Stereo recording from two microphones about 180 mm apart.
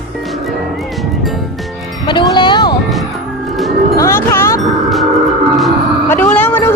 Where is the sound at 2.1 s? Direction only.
25° left (ahead or behind).